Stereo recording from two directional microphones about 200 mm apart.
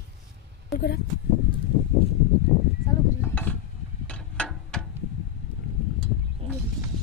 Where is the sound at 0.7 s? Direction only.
50° left (ahead or behind).